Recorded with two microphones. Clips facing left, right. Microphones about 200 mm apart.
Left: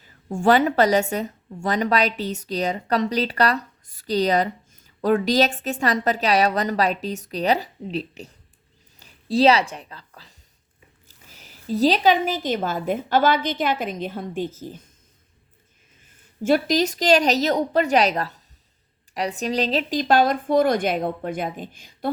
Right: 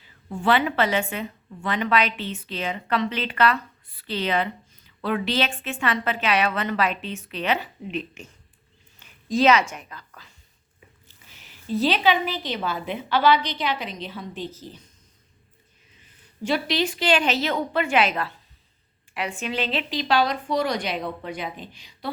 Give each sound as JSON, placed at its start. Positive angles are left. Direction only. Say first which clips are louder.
{"t": 0.0, "sound": "a woman's voice", "louder": "left 5 dB", "side_deg": 45}
{"t": 9.3, "sound": "a woman's voice", "louder": "left 2 dB", "side_deg": 35}
{"t": 16.0, "sound": "a woman's voice", "louder": "left 3 dB", "side_deg": 50}